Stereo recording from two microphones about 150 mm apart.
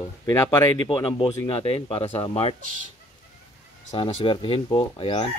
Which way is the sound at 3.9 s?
35° left (ahead or behind).